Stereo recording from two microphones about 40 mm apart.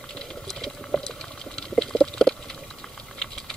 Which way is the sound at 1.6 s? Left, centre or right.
Centre.